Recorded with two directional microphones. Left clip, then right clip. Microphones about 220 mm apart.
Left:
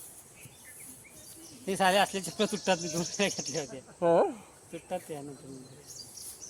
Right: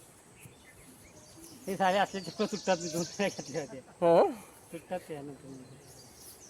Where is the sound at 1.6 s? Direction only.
55° left (ahead or behind).